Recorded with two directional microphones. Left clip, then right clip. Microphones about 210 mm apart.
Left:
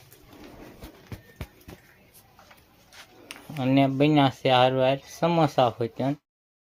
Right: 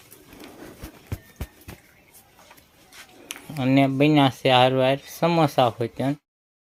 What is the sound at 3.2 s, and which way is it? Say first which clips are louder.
Speech: right 3 dB; 15° right (ahead or behind).